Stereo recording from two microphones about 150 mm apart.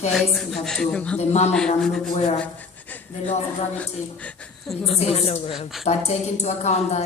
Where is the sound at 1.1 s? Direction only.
45° left (ahead or behind).